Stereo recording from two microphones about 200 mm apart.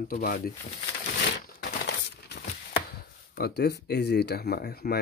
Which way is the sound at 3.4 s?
55° left (ahead or behind).